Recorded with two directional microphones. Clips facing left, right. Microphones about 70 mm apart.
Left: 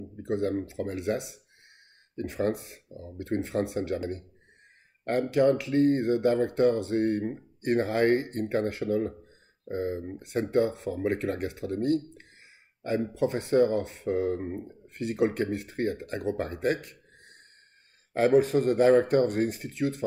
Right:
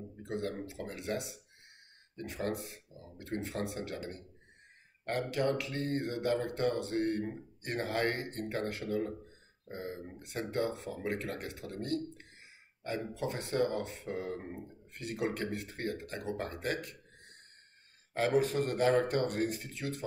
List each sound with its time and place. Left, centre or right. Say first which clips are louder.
0.3 s speech: left 9 dB; left
5.0 s speech: left 9 dB; left
18.1 s speech: left 8 dB; left